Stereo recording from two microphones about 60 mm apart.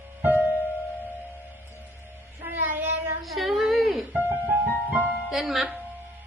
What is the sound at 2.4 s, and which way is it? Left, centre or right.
Child singing, right.